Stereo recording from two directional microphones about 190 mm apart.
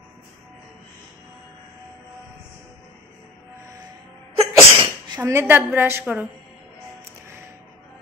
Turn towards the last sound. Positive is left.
turn(degrees=-10)  # may be behind; listen again after turning